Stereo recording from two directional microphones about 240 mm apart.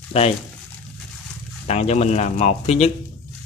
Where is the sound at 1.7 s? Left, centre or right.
Left.